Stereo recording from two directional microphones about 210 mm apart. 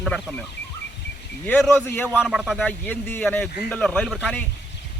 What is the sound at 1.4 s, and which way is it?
Speech, 10° left (ahead or behind).